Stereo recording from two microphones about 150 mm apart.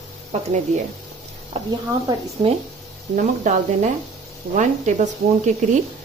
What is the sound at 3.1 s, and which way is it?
A woman's voice, 60° right (ahead or behind).